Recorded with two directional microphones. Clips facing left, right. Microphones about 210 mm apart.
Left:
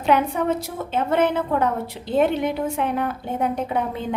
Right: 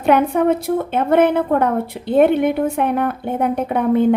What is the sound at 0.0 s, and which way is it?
A woman's voice, 55° right (ahead or behind).